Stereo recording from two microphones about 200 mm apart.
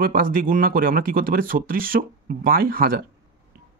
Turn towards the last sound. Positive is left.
turn(degrees=-45)  # may be behind; listen again after turning